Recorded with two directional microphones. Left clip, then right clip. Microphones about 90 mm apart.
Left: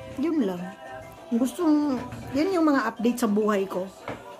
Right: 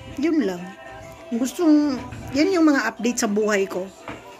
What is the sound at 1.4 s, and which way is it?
A woman's voice, 50° left (ahead or behind).